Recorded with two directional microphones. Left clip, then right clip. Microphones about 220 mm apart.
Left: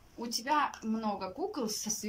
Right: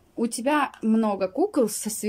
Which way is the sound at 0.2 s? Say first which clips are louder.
Right 7 dB; 55° right (ahead or behind).